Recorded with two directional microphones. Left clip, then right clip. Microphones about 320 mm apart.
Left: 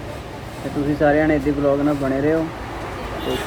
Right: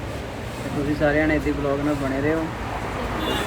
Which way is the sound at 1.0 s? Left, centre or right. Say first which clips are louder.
Left 4 dB; left.